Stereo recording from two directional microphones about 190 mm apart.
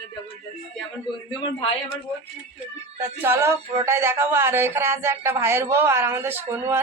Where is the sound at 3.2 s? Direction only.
15° right (ahead or behind).